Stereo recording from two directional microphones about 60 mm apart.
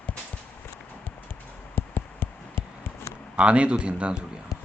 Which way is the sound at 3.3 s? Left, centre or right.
Centre.